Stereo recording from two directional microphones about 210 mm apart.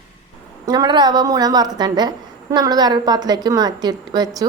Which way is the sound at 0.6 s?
20° right (ahead or behind).